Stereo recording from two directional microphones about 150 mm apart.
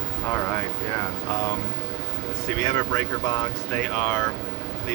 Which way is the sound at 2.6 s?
20° left (ahead or behind).